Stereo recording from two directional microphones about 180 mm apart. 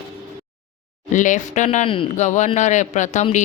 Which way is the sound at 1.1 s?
45° left (ahead or behind).